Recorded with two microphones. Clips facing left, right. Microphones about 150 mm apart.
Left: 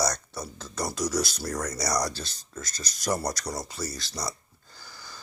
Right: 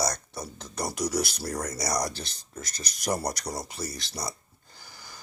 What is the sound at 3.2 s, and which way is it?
Speech, 30° right (ahead or behind).